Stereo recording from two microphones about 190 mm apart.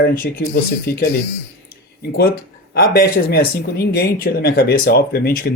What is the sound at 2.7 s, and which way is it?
Speech, 50° left (ahead or behind).